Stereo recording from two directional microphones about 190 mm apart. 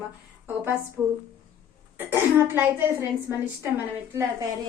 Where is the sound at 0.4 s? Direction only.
10° right (ahead or behind).